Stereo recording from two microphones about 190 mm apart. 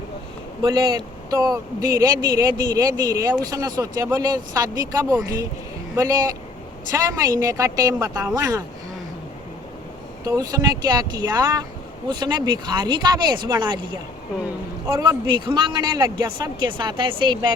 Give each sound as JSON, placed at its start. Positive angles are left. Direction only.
{"t": 0.6, "sound": "speech", "side_deg": -20}
{"t": 10.2, "sound": "speech", "side_deg": -20}
{"t": 14.8, "sound": "speech", "side_deg": -20}